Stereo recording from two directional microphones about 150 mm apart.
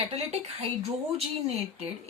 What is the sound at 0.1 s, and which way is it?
Speech, 40° right (ahead or behind).